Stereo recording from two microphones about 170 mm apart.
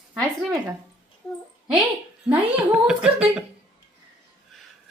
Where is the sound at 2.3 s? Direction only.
5° right (ahead or behind).